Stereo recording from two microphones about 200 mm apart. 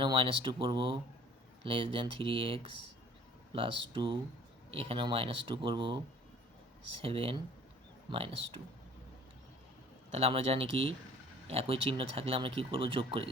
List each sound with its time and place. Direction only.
0.0 s speech: 25° right (ahead or behind)
7.0 s speech: 30° right (ahead or behind)
10.1 s speech: 30° right (ahead or behind)